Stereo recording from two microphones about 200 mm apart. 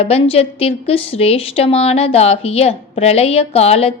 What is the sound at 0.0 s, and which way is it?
A woman's voice, 30° left (ahead or behind).